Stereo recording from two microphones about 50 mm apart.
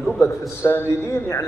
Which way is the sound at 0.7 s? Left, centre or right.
Left.